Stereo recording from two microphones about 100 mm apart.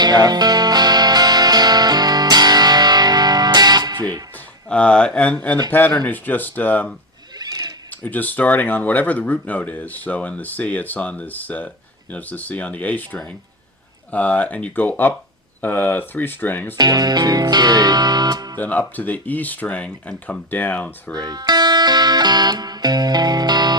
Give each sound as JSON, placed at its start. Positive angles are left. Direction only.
{"t": 0.0, "sound": "music", "side_deg": -45}
{"t": 4.7, "sound": "speech", "side_deg": 10}
{"t": 16.7, "sound": "music", "side_deg": -40}
{"t": 18.6, "sound": "speech", "side_deg": 15}
{"t": 21.2, "sound": "speech", "side_deg": -45}